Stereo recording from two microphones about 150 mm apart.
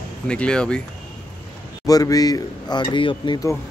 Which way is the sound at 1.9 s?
25° left (ahead or behind).